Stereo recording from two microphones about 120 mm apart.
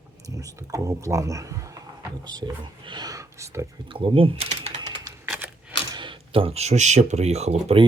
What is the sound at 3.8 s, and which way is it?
Speech, 45° right (ahead or behind).